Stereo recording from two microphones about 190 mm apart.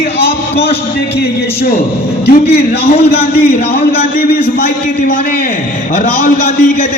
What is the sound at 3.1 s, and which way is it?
A man's voice, 55° left (ahead or behind).